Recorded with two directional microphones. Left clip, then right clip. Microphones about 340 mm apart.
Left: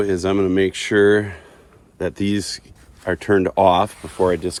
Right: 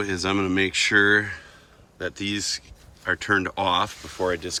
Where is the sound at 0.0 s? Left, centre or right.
Centre.